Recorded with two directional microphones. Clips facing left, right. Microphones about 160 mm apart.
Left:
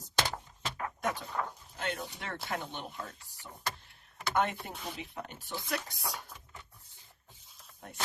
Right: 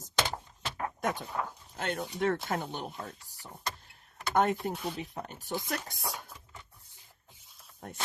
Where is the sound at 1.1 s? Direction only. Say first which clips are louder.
Right 1 dB; 10° right (ahead or behind).